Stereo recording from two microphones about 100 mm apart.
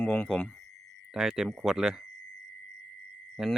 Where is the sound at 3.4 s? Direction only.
5° right (ahead or behind).